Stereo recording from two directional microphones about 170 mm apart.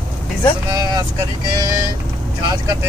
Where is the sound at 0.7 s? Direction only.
20° right (ahead or behind).